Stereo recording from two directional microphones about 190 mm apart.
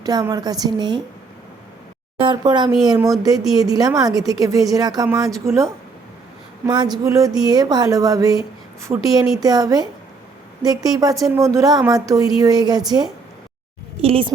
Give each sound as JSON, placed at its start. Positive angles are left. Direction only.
{"t": 0.0, "sound": "a woman's voice", "side_deg": -20}
{"t": 2.1, "sound": "a woman's voice", "side_deg": -25}
{"t": 14.0, "sound": "a woman's voice", "side_deg": -30}